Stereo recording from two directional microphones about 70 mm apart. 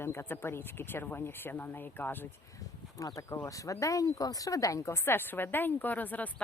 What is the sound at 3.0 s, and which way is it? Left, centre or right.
Speech, left.